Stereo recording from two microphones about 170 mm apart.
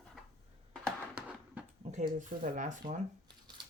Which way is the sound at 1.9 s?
50° right (ahead or behind).